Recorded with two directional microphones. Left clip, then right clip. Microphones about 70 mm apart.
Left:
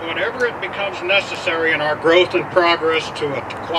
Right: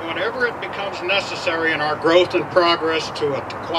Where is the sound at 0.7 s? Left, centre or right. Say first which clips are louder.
Left 5 dB; right.